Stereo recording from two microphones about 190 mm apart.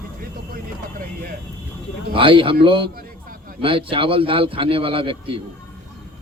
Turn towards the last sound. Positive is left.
turn(degrees=-30)  # may be behind; listen again after turning